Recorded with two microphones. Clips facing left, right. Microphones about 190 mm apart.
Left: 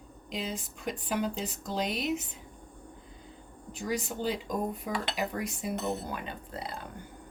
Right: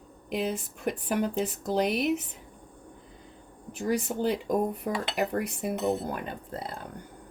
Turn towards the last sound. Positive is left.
turn(degrees=-45)  # may be behind; listen again after turning